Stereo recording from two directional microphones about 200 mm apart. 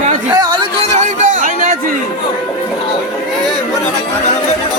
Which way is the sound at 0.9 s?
40° right (ahead or behind).